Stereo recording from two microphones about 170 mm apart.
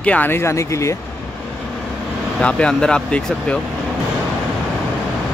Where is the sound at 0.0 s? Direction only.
10° left (ahead or behind).